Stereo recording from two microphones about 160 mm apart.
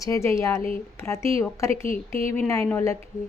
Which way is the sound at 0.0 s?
20° left (ahead or behind).